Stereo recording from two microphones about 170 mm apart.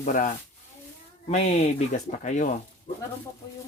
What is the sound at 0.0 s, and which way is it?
Speech, 50° left (ahead or behind).